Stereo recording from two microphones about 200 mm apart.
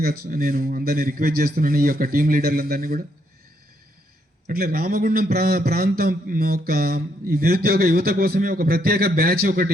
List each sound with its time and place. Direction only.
0.0 s a man's voice: 45° right (ahead or behind)
4.4 s a man's voice: 50° right (ahead or behind)